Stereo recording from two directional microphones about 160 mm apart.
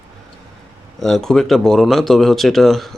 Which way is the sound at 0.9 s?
Centre (ahead or behind).